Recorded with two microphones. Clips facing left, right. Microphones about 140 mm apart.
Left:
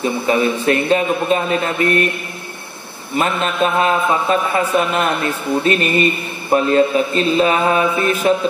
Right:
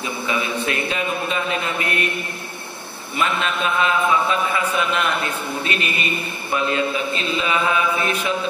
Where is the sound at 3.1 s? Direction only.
40° left (ahead or behind).